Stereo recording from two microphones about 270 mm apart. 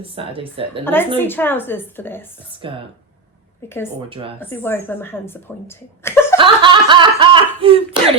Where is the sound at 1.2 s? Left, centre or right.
Centre.